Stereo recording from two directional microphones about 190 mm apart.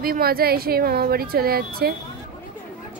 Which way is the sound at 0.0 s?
50° right (ahead or behind).